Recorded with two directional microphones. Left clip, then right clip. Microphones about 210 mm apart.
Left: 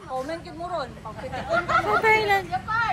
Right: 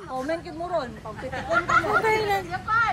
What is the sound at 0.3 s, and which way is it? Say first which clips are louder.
Speech: right 3 dB; 35° right (ahead or behind).